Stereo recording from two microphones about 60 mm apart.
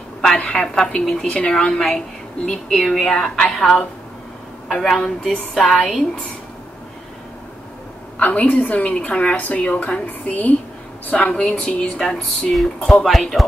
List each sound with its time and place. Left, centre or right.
0.5 s a woman's voice: centre
1.5 s speech: centre
4.7 s a woman's voice: centre
8.2 s a woman's voice: left; by 13.5 s centre